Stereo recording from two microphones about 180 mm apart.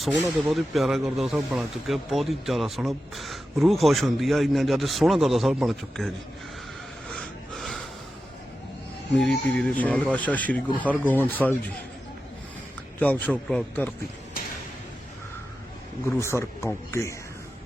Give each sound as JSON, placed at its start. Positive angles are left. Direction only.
{"t": 0.2, "sound": "speech", "side_deg": -5}
{"t": 7.1, "sound": "snort", "side_deg": 0}
{"t": 9.1, "sound": "a man's voice", "side_deg": 5}
{"t": 13.0, "sound": "a man's voice", "side_deg": 10}
{"t": 14.4, "sound": "a sound", "side_deg": 55}
{"t": 16.1, "sound": "a man's voice", "side_deg": 15}